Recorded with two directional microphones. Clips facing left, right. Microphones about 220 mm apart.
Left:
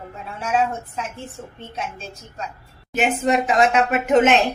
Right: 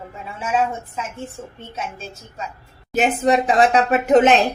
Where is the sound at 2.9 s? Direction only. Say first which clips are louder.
Right 2 dB; 35° right (ahead or behind).